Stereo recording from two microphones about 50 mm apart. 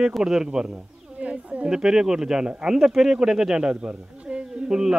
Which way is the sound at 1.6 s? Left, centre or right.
Centre.